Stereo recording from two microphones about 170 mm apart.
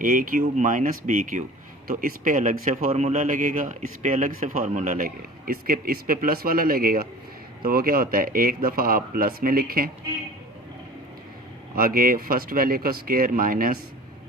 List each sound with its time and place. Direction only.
0.0 s speech: 55° right (ahead or behind)
11.7 s speech: 55° right (ahead or behind)